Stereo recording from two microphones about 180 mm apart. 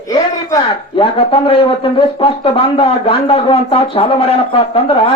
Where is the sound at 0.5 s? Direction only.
30° left (ahead or behind).